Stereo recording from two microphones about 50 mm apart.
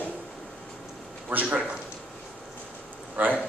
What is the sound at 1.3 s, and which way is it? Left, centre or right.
Speech, right.